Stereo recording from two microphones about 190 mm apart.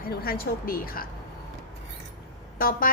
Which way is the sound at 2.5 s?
50° left (ahead or behind).